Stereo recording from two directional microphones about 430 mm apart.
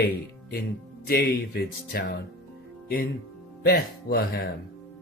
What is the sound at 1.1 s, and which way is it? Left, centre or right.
Speech, left.